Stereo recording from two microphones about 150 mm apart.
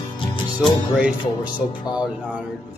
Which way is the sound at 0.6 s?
5° right (ahead or behind).